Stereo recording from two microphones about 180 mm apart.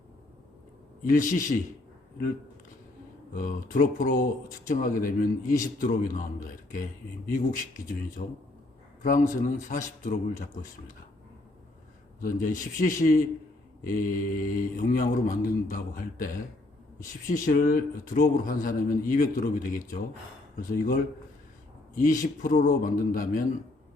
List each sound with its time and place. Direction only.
1.0 s speech: 45° left (ahead or behind)
3.3 s speech: 45° left (ahead or behind)
8.2 s speech: 45° left (ahead or behind)
12.2 s speech: 50° left (ahead or behind)